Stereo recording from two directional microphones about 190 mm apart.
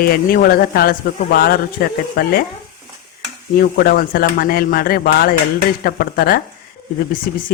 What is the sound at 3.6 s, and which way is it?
A man's voice, 55° left (ahead or behind).